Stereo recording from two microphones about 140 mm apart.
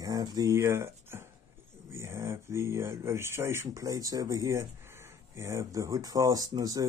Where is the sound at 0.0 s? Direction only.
25° right (ahead or behind).